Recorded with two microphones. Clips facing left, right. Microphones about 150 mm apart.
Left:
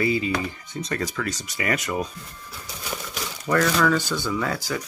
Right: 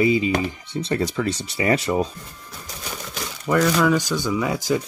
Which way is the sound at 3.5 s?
10° right (ahead or behind).